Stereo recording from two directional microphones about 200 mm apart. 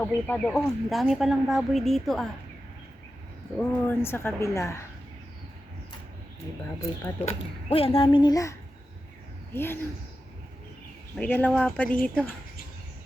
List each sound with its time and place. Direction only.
0.0 s speech: 5° left (ahead or behind)
3.6 s a woman's voice: 10° left (ahead or behind)
7.7 s a woman's voice: 30° left (ahead or behind); by 9.8 s 10° left (ahead or behind)
11.2 s a woman's voice: 10° left (ahead or behind)